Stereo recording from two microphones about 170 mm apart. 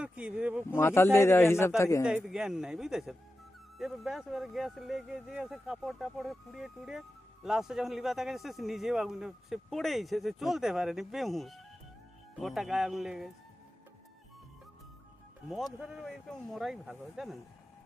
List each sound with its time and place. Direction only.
0.0 s speech: 5° right (ahead or behind)
0.7 s speech: 15° left (ahead or behind)
2.0 s a man's voice: 5° right (ahead or behind)
15.4 s a man's voice: centre (ahead or behind)